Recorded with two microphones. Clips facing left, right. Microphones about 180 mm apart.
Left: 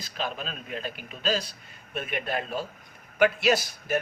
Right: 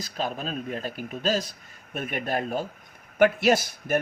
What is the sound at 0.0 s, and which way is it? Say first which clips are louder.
Speech: right 3 dB; 45° right (ahead or behind).